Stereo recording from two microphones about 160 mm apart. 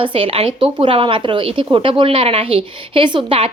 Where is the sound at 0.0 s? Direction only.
35° right (ahead or behind).